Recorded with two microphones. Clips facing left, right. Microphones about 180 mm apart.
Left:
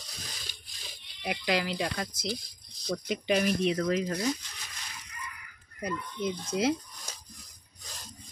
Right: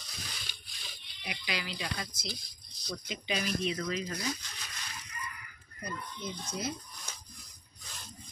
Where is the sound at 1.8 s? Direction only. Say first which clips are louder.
Left 7 dB; 50° left (ahead or behind).